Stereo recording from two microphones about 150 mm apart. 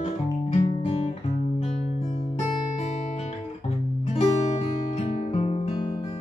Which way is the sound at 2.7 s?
45° left (ahead or behind).